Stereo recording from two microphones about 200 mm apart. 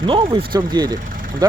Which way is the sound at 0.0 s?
25° right (ahead or behind).